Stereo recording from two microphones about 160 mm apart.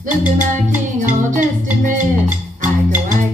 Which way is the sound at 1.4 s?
55° right (ahead or behind).